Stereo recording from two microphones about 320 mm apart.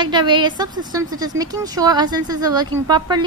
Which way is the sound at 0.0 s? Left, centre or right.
Centre.